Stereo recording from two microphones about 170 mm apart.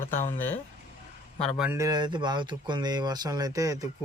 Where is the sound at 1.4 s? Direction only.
5° left (ahead or behind).